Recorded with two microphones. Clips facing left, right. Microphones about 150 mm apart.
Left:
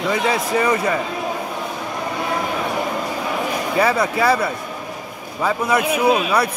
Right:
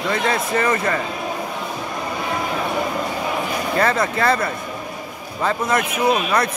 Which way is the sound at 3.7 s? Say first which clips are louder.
Left 1 dB; 10° left (ahead or behind).